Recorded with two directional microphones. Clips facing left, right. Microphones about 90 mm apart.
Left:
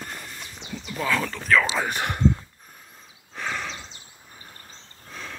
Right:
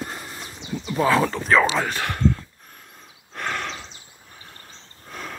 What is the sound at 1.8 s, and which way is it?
Speech, 15° left (ahead or behind).